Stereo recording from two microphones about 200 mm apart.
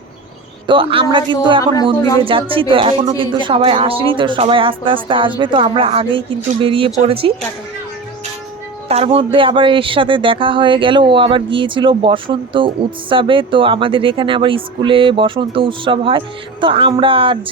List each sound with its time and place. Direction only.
0.7 s speech: 25° right (ahead or behind)
8.9 s speech: 30° right (ahead or behind)